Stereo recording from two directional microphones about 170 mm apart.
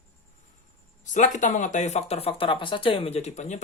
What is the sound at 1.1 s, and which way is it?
Speech, 50° left (ahead or behind).